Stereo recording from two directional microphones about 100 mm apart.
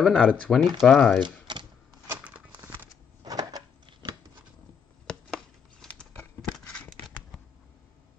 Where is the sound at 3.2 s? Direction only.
40° right (ahead or behind).